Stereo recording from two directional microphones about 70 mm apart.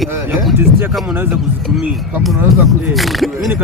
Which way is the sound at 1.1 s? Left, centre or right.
Right.